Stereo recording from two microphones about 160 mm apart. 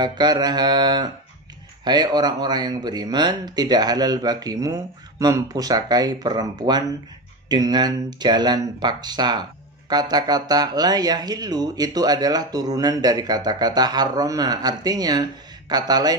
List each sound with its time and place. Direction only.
0.0 s speech: 25° right (ahead or behind)